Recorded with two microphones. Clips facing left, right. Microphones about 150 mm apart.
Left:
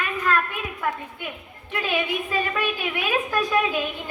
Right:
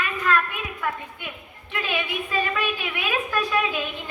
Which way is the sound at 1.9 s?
40° left (ahead or behind).